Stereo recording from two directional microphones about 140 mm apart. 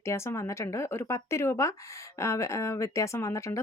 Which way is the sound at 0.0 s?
20° left (ahead or behind).